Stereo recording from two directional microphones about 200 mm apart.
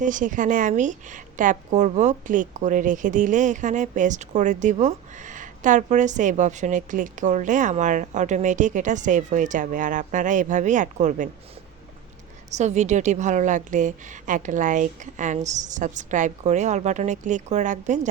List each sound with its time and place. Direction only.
0.0 s a woman's voice: 40° right (ahead or behind)
12.5 s a woman's voice: 35° right (ahead or behind)